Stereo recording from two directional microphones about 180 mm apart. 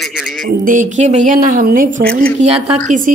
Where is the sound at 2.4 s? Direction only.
35° right (ahead or behind).